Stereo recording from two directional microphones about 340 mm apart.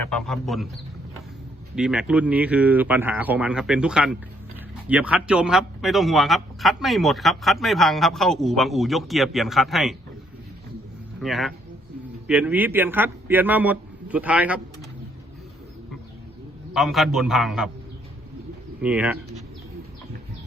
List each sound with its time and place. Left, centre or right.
0.1 s a man's voice: centre
1.7 s a man's voice: centre
11.2 s a man's voice: centre
16.7 s a man's voice: centre
18.8 s a man's voice: centre